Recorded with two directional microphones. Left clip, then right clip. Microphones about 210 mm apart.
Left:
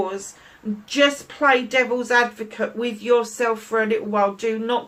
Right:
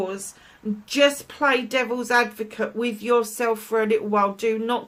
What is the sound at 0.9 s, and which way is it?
Speech, 45° right (ahead or behind).